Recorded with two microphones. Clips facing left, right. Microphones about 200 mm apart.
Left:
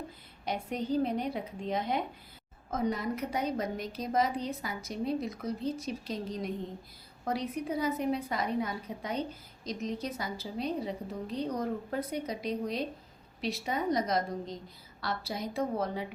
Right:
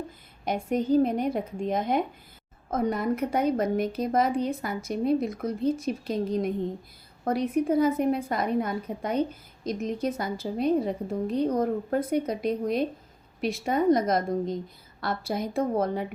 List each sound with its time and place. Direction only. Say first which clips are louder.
0.4 s a woman's voice: right 7 dB; 50° right (ahead or behind)